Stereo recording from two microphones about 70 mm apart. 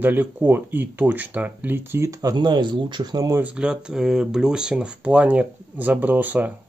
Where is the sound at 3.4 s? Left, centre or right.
Centre.